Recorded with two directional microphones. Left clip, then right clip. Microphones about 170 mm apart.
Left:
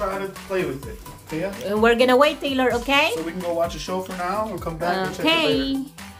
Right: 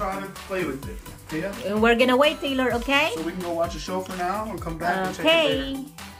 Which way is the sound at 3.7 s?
25° left (ahead or behind).